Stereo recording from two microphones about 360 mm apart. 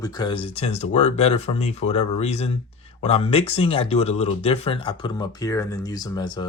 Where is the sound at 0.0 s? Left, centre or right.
Centre.